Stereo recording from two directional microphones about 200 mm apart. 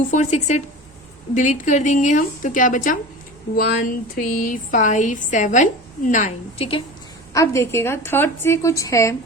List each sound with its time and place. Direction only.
0.1 s speech: 35° left (ahead or behind)
7.3 s a woman's voice: 15° left (ahead or behind)